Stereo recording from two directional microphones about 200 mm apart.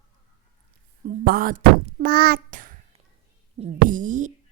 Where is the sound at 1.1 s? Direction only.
45° right (ahead or behind).